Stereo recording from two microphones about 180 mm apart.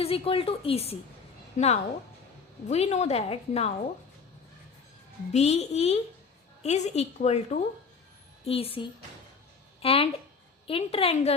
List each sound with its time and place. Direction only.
0.0 s a woman's voice: 30° left (ahead or behind)
5.3 s a woman's voice: 35° left (ahead or behind)